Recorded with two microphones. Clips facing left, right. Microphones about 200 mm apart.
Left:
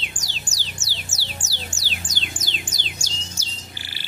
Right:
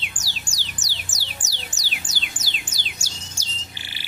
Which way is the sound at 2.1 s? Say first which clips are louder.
Left 3 dB; 5° right (ahead or behind).